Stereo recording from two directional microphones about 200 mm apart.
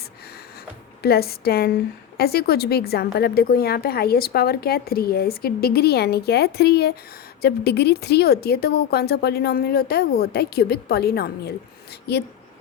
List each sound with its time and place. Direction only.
1.0 s a woman's voice: 50° left (ahead or behind)